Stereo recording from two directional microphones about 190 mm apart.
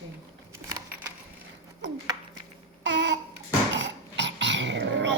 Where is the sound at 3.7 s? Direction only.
75° right (ahead or behind).